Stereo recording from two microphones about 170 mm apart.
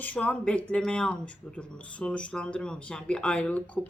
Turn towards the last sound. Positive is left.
turn(degrees=10)  # may be behind; listen again after turning